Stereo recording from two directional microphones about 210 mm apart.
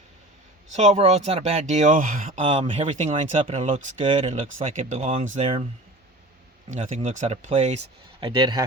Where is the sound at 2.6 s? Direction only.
25° right (ahead or behind).